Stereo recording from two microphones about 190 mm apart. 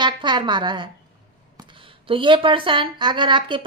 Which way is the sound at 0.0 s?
25° right (ahead or behind).